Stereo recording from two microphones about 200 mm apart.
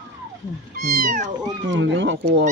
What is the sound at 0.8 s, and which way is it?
Speech, 40° right (ahead or behind).